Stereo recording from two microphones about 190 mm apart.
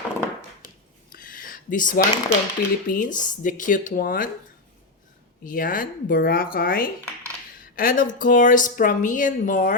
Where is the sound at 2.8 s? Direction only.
45° left (ahead or behind).